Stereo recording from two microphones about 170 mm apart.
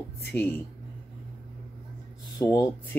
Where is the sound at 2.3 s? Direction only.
20° left (ahead or behind).